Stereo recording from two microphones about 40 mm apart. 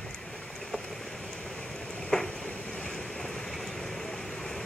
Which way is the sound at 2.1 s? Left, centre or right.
Centre.